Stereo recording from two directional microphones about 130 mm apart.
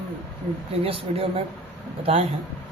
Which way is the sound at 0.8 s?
45° right (ahead or behind).